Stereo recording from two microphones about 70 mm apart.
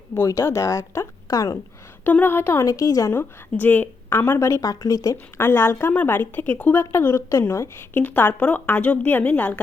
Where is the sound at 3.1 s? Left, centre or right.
Left.